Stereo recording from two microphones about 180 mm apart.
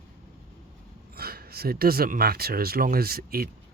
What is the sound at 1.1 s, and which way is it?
Speech, 55° right (ahead or behind).